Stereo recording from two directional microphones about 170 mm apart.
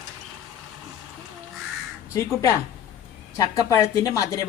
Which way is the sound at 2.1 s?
20° left (ahead or behind).